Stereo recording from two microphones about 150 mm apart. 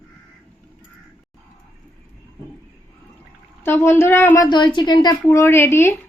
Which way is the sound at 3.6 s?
15° left (ahead or behind).